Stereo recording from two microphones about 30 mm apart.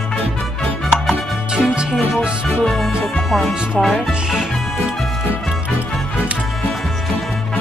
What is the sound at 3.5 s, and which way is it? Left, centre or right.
Speech, right.